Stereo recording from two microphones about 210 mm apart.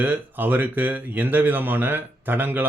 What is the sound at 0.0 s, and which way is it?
Speech, 10° right (ahead or behind).